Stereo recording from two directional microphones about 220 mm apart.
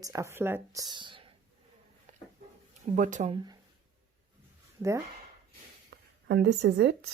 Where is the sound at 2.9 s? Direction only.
35° right (ahead or behind).